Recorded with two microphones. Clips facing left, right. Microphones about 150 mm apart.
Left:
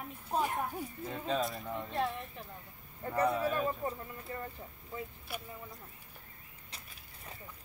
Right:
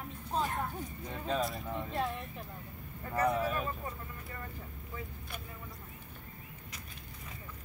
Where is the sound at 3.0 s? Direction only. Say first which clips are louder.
Even; 30° left (ahead or behind).